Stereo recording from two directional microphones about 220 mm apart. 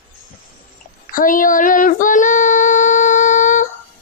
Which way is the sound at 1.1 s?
40° left (ahead or behind).